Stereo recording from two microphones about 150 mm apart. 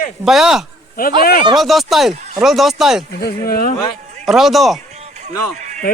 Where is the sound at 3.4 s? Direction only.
85° left.